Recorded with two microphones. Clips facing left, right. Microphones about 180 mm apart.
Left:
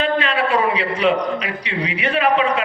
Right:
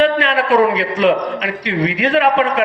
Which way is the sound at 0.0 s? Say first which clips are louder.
Right 4 dB; 75° right (ahead or behind).